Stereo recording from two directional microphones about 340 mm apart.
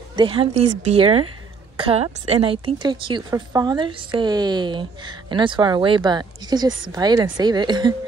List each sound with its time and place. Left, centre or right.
0.1 s a woman's voice: centre